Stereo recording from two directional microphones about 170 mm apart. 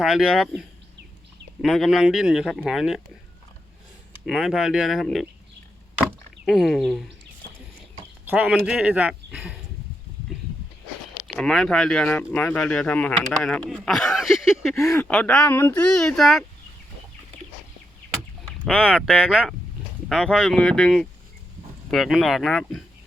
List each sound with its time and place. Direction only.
0.0 s speech: centre (ahead or behind)
1.6 s speech: centre (ahead or behind)
4.3 s speech: 5° right (ahead or behind)
6.1 s a sound: centre (ahead or behind)
8.2 s speech: 10° right (ahead or behind)
11.3 s speech: 5° left (ahead or behind)
14.8 s speech: 15° left (ahead or behind)
15.0 s speech: 5° left (ahead or behind)
18.9 s speech: 5° right (ahead or behind)